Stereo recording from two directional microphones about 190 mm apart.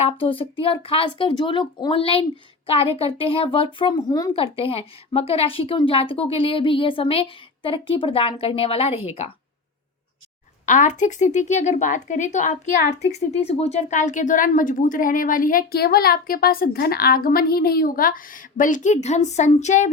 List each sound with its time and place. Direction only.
0.0 s a woman's voice: 30° left (ahead or behind)
10.7 s speech: 40° left (ahead or behind)